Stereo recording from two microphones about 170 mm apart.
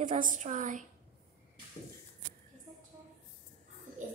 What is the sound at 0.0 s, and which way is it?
Speech, 45° right (ahead or behind).